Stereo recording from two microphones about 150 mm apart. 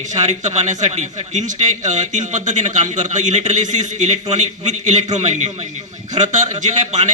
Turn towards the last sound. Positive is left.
turn(degrees=-50)  # may be behind; listen again after turning